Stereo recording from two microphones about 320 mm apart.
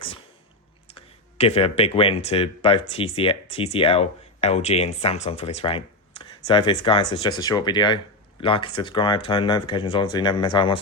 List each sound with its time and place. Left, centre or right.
0.9 s speech: centre